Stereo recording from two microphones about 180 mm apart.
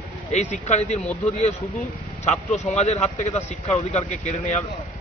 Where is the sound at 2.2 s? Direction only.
40° left (ahead or behind).